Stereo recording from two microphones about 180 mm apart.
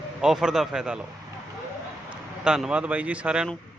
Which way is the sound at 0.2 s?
5° right (ahead or behind).